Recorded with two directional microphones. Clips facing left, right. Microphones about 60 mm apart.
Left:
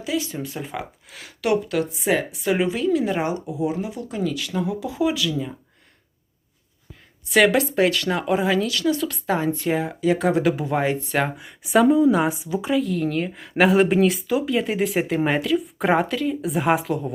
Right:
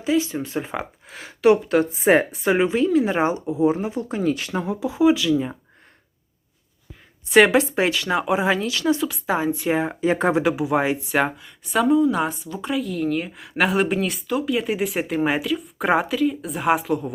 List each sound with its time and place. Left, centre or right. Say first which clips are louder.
0.0 s speech: right 4 dB; right
7.3 s speech: right 2 dB; right
8.4 s speech: even; right
9.0 s speech: even; centre
9.7 s speech: right 1 dB; right
10.4 s speech: right 1 dB; centre
11.3 s a woman's voice: left 4 dB; centre
12.7 s a woman's voice: even; centre